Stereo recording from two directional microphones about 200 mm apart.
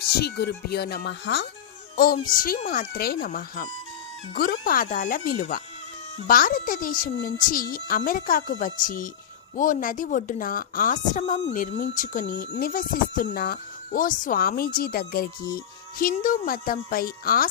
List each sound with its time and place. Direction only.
0.2 s speech: 55° left (ahead or behind)
2.3 s a woman's voice: 45° left (ahead or behind)